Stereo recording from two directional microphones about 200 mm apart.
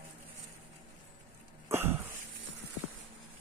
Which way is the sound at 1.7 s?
10° right (ahead or behind).